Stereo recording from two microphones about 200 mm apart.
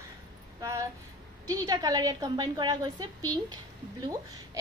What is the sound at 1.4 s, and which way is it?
A woman's voice, 20° right (ahead or behind).